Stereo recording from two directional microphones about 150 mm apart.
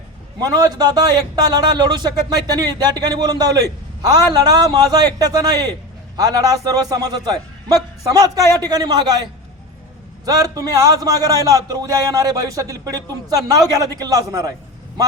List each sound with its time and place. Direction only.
0.3 s a man's voice: 25° right (ahead or behind)
10.2 s a man's voice: 25° right (ahead or behind)